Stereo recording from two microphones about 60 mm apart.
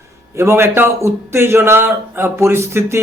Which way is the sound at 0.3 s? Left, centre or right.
Right.